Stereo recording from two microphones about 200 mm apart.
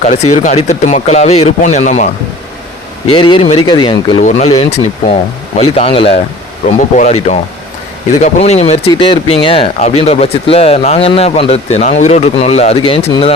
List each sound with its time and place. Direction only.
0.1 s speech: 35° left (ahead or behind)
3.1 s speech: 25° left (ahead or behind)